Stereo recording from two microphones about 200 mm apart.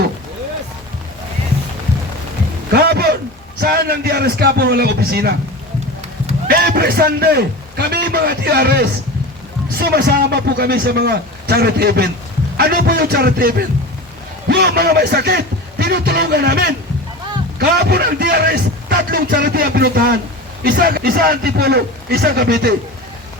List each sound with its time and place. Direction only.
2.7 s a sound: 50° right (ahead or behind)
3.6 s a man's voice: 50° right (ahead or behind)
6.5 s a man's voice: 50° right (ahead or behind)